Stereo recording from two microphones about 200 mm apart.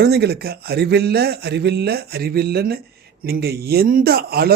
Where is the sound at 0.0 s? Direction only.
55° right (ahead or behind).